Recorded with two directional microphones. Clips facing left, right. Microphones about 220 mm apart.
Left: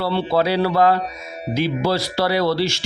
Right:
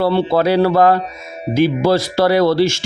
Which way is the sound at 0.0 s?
50° right (ahead or behind).